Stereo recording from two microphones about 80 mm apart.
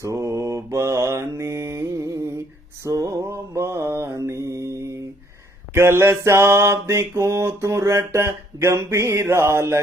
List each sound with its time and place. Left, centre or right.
0.0 s mantra: right